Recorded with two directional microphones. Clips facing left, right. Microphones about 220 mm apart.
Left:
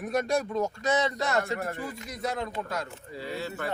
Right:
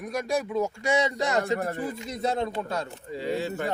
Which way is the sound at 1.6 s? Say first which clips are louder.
Right 4 dB; 35° right (ahead or behind).